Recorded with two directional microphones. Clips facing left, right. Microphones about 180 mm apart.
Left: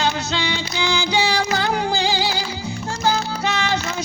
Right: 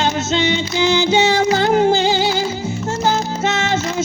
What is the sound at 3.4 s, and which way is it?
Music, 25° right (ahead or behind).